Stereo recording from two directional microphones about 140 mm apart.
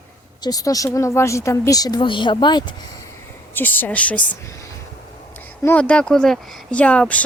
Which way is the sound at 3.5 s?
15° left (ahead or behind).